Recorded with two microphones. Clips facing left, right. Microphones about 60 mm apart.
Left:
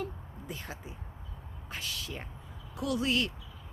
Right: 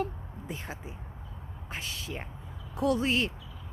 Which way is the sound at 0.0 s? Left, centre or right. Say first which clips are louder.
Right 5 dB; right.